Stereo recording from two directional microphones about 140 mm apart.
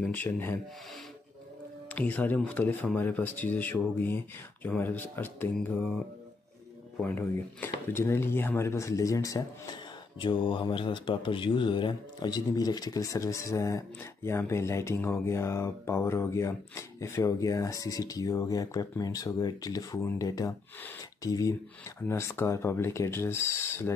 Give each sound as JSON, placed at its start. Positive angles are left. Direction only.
{"t": 0.0, "sound": "speech", "side_deg": 10}
{"t": 1.9, "sound": "speech", "side_deg": 10}
{"t": 7.0, "sound": "speech", "side_deg": 15}
{"t": 10.1, "sound": "speech", "side_deg": 35}